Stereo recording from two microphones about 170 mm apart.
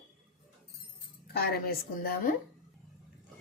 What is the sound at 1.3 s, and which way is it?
Speech, 60° left (ahead or behind).